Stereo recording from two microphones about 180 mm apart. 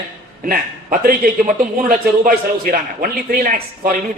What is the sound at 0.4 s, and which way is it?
A man's voice, 50° right (ahead or behind).